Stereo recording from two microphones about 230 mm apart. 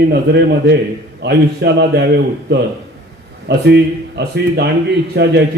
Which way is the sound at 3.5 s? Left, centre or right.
Right.